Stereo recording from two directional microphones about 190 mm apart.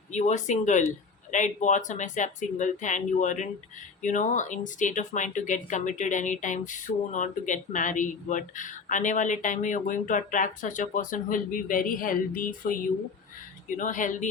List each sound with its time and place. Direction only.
0.1 s speech: 40° left (ahead or behind)
13.7 s speech: 45° left (ahead or behind)